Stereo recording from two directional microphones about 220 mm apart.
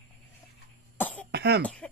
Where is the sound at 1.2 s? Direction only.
50° right (ahead or behind).